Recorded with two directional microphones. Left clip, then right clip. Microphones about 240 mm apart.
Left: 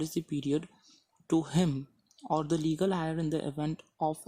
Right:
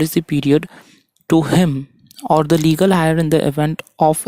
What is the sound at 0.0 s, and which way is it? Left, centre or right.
Speech, right.